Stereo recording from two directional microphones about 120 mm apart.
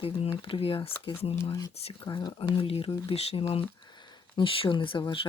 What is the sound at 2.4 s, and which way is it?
Speech, 50° left (ahead or behind).